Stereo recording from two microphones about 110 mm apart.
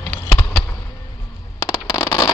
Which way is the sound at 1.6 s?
40° left (ahead or behind).